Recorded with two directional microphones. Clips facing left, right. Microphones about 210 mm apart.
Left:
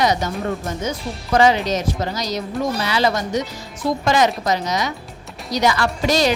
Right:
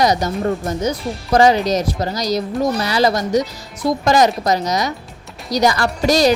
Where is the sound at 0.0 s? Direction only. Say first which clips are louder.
Right 3 dB; 40° right (ahead or behind).